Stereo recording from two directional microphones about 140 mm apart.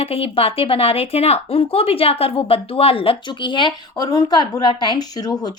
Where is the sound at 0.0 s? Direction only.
45° left (ahead or behind).